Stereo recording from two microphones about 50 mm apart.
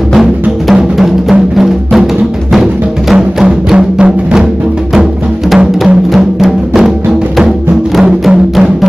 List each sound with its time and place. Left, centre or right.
0.1 s drum: centre
1.6 s music: centre
3.1 s music: centre
3.4 s music: centre
6.1 s music: centre